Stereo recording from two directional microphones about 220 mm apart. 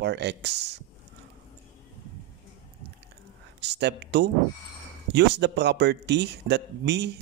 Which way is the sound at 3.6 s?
50° right (ahead or behind).